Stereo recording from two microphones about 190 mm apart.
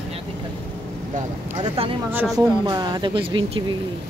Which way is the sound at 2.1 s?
10° right (ahead or behind).